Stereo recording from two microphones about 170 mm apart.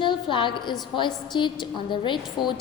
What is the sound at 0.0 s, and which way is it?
A woman's voice, 30° left (ahead or behind).